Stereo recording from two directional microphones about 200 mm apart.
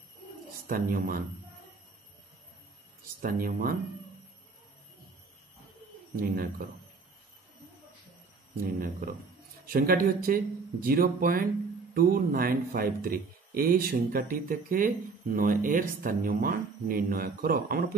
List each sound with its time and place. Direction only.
0.7 s speech: 45° right (ahead or behind)
3.2 s speech: 45° right (ahead or behind)
6.1 s speech: 45° right (ahead or behind)
8.5 s speech: 45° right (ahead or behind)